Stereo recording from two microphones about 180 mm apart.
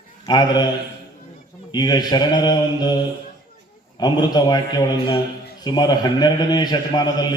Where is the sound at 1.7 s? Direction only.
20° left (ahead or behind).